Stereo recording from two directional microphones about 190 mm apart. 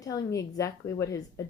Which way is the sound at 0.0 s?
20° left (ahead or behind).